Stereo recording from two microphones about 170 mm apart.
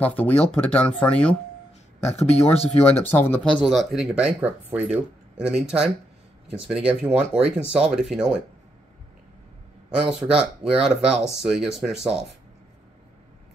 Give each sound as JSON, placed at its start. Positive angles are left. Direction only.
{"t": 0.0, "sound": "speech", "side_deg": 10}
{"t": 2.5, "sound": "speech", "side_deg": 35}
{"t": 3.0, "sound": "speech", "side_deg": 10}
{"t": 3.6, "sound": "speech", "side_deg": 0}
{"t": 9.8, "sound": "speech", "side_deg": -5}